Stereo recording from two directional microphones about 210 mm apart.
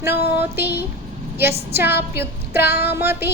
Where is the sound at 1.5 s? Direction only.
30° right (ahead or behind).